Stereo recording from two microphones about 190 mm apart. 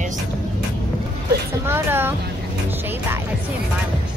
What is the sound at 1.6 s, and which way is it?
Speech, 10° right (ahead or behind).